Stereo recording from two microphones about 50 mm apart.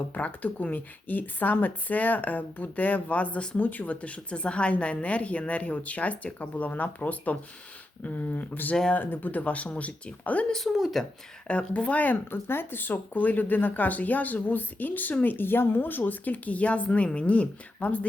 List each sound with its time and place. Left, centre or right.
0.1 s a woman's voice: left
10.5 s speech: centre
11.4 s speech: left